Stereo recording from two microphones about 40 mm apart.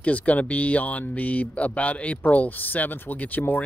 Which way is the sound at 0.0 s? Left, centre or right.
Left.